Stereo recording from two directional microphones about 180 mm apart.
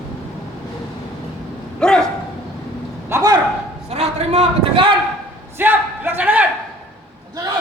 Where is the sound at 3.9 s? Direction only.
35° right (ahead or behind).